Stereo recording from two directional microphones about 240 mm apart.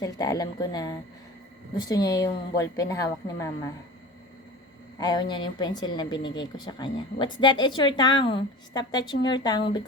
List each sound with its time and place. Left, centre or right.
0.0 s speech: centre
4.9 s speech: centre